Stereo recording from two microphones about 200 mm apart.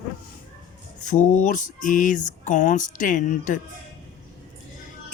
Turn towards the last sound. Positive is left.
turn(degrees=40)  # may be behind; listen again after turning